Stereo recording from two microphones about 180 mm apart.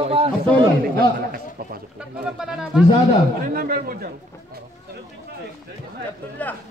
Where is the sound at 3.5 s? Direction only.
55° right (ahead or behind).